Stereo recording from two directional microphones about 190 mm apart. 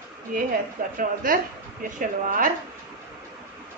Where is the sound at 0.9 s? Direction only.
50° right (ahead or behind).